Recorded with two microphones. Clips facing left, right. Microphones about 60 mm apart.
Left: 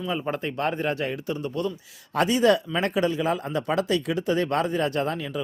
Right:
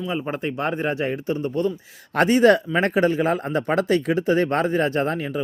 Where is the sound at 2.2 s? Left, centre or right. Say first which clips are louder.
Right 4 dB; right.